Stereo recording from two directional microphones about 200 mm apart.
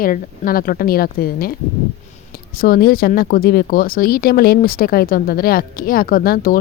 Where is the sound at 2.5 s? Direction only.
45° left (ahead or behind).